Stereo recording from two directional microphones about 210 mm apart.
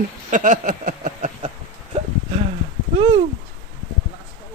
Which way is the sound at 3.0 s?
30° right (ahead or behind).